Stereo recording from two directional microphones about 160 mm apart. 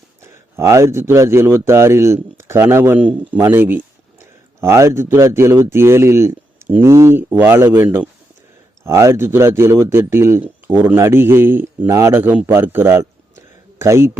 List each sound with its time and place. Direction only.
0.5 s a man's voice: 15° right (ahead or behind)
8.8 s speech: 20° right (ahead or behind)